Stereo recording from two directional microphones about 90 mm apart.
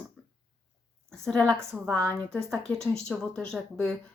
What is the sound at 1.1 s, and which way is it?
A woman's voice, 5° left (ahead or behind).